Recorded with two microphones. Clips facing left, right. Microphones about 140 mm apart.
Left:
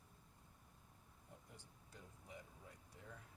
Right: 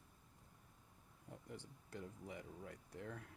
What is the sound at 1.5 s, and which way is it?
Speech, 70° right (ahead or behind).